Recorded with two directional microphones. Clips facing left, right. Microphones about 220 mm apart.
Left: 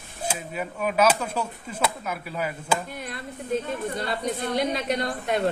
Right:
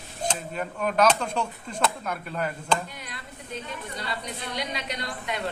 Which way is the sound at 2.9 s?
50° left (ahead or behind).